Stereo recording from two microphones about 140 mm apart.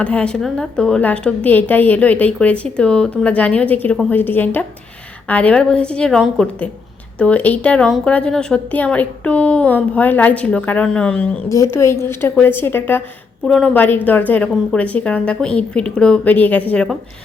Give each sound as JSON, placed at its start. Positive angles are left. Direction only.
{"t": 0.0, "sound": "a woman's voice", "side_deg": 10}
{"t": 11.4, "sound": "a woman's voice", "side_deg": 20}